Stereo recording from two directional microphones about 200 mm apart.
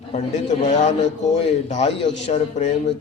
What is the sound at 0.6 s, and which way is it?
Speech, 35° left (ahead or behind).